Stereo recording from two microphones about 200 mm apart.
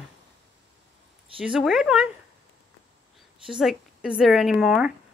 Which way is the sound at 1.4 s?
Centre (ahead or behind).